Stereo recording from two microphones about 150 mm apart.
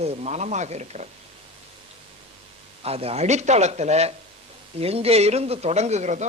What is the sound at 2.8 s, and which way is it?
Speech, 40° right (ahead or behind).